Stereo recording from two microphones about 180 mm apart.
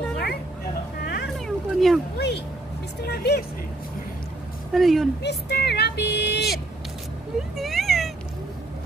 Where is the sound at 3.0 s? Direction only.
65° left (ahead or behind).